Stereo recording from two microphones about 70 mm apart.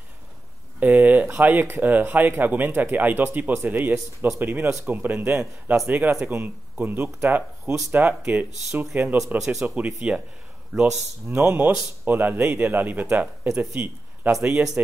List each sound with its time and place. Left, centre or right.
0.7 s a sound: right
1.3 s speech: right
9.4 s a man's voice: centre
9.8 s speech: centre
10.7 s a man's voice: centre
11.2 s speech: right
14.4 s speech: centre